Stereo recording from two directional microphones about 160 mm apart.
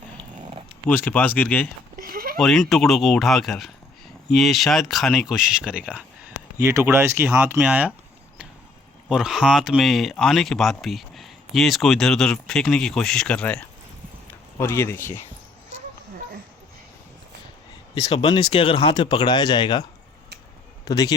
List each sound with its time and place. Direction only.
0.9 s speech: 10° left (ahead or behind)
2.0 s a sound: 65° right (ahead or behind)
2.4 s speech: centre (ahead or behind)
9.0 s speech: 5° right (ahead or behind); by 15.2 s 15° left (ahead or behind)
18.1 s speech: 35° left (ahead or behind)